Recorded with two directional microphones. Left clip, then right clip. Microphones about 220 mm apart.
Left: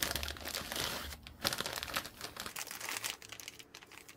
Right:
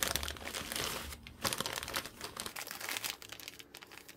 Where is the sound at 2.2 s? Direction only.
5° right (ahead or behind).